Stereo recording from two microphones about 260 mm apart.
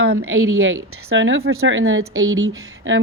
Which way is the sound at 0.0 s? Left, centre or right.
Right.